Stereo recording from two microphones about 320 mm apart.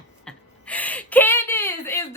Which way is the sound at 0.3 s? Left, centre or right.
Centre.